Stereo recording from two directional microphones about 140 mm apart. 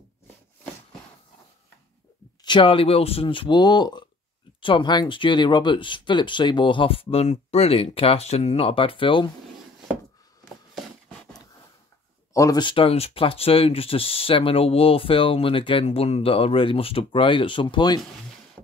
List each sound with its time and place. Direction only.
2.4 s speech: 35° left (ahead or behind)
12.4 s speech: 25° left (ahead or behind)
12.6 s speech: 40° left (ahead or behind)